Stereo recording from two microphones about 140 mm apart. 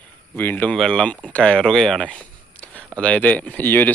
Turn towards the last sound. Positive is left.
turn(degrees=15)  # may be behind; listen again after turning